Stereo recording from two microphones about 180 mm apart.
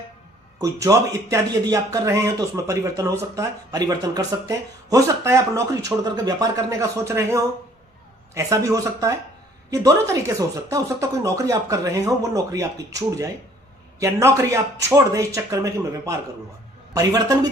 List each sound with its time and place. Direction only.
0.6 s speech: 15° right (ahead or behind)